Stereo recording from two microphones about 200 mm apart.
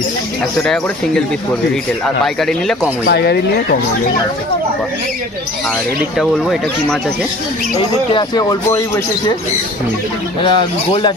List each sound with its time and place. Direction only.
2.2 s speech: centre (ahead or behind)
3.1 s speech: 55° left (ahead or behind)
6.1 s speech: centre (ahead or behind)
8.1 s speech: 20° left (ahead or behind)
10.4 s speech: 25° left (ahead or behind)